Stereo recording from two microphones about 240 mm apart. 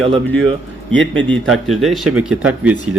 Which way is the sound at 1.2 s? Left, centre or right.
Centre.